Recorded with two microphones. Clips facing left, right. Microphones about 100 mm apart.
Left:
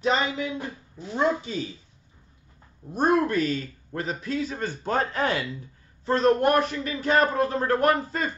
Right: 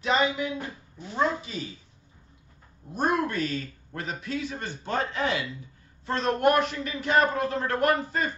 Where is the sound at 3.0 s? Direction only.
35° left (ahead or behind).